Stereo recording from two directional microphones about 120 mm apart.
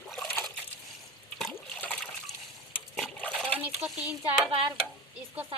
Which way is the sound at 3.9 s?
5° right (ahead or behind).